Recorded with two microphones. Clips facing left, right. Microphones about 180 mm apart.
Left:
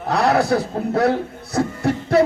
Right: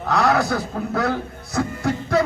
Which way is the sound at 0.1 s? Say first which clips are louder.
Left 2 dB; 30° left (ahead or behind).